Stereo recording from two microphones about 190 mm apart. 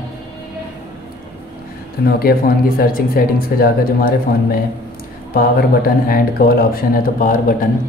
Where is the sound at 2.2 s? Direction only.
50° left (ahead or behind).